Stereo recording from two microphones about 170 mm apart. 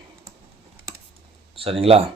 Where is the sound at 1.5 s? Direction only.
35° right (ahead or behind).